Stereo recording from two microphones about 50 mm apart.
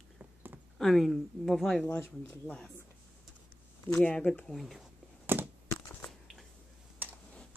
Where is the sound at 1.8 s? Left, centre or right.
Left.